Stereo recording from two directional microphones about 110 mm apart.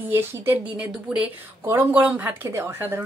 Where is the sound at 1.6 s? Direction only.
20° right (ahead or behind).